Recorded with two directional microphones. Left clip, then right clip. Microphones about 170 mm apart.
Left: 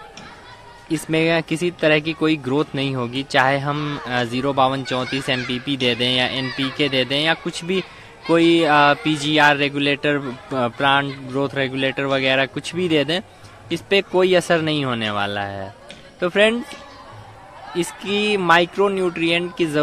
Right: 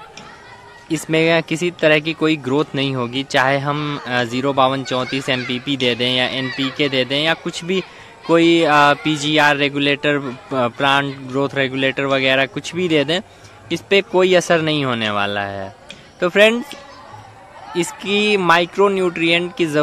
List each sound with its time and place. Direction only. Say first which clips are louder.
0.8 s speech: right 3 dB; 15° right (ahead or behind)
17.7 s speech: right 3 dB; 20° right (ahead or behind)